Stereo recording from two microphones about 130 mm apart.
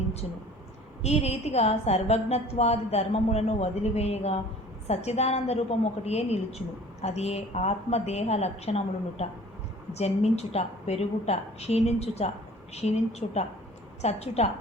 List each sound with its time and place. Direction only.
1.0 s a woman's voice: 55° left (ahead or behind)